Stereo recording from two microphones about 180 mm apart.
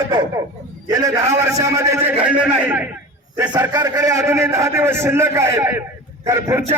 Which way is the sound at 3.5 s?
20° right (ahead or behind).